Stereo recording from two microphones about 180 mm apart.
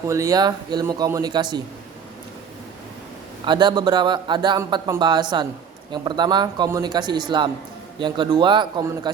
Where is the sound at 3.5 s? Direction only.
25° right (ahead or behind).